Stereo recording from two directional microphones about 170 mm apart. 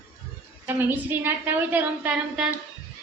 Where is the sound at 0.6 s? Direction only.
10° right (ahead or behind).